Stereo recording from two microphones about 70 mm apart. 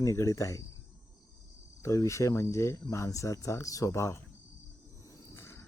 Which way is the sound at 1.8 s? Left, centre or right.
Left.